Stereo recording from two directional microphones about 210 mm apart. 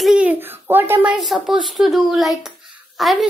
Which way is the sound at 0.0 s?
5° right (ahead or behind).